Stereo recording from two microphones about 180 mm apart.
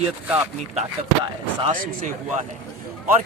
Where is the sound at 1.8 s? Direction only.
50° right (ahead or behind).